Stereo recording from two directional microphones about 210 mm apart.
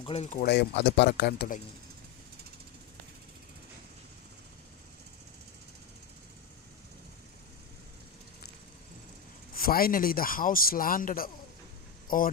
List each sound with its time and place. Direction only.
0.0 s speech: 30° left (ahead or behind)
0.4 s a man's voice: 50° left (ahead or behind)
9.6 s a man's voice: 45° left (ahead or behind)